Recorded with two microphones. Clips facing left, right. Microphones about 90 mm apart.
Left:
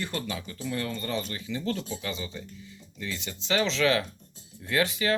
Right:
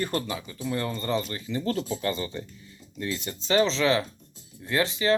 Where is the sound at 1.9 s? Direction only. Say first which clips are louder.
Right 6 dB; 50° right (ahead or behind); by 5.1 s 25° right (ahead or behind).